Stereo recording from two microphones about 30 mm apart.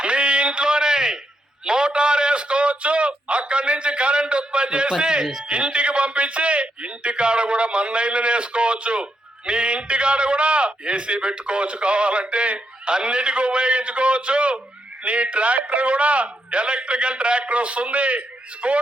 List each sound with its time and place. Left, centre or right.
0.0 s a sound: right
5.2 s speech: centre
5.5 s a man's voice: right